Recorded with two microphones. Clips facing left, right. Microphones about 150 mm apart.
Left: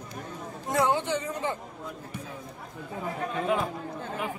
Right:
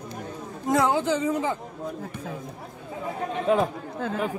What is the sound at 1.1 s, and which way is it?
Speech, 90° right.